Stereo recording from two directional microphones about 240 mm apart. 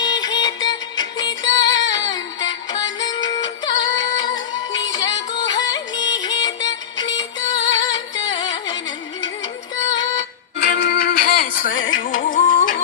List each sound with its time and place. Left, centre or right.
0.0 s music: centre
10.6 s music: left